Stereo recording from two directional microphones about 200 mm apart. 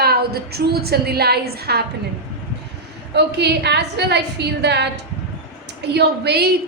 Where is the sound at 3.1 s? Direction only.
55° right (ahead or behind).